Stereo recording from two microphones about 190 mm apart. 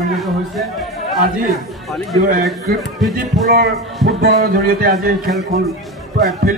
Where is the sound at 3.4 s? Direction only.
50° right (ahead or behind).